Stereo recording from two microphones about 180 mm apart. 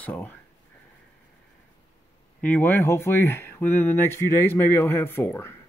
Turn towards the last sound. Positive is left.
turn(degrees=10)  # may be behind; listen again after turning